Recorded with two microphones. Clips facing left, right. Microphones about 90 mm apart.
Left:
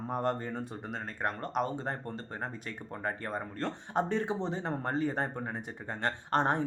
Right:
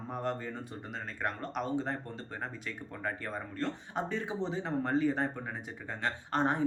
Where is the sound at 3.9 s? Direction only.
55° left (ahead or behind).